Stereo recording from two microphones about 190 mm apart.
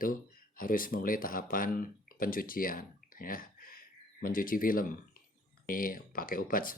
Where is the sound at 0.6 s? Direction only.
45° left (ahead or behind).